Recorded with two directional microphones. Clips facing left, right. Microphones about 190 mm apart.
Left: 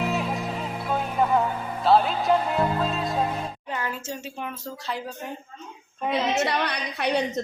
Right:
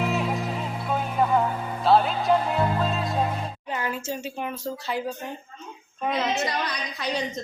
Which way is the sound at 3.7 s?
15° right (ahead or behind).